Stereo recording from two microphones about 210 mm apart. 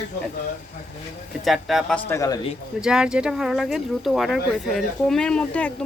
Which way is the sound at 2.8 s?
5° right (ahead or behind).